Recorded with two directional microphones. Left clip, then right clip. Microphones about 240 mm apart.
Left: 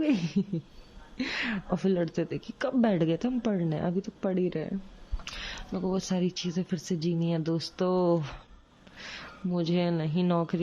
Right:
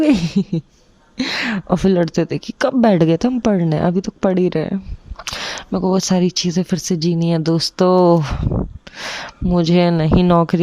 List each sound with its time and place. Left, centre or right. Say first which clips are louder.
0.0 s speech: right 13 dB; right